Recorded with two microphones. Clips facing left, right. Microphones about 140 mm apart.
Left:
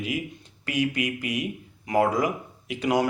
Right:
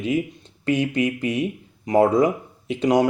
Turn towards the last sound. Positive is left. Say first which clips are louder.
# right 5 dB
turn(degrees=-20)  # may be behind; listen again after turning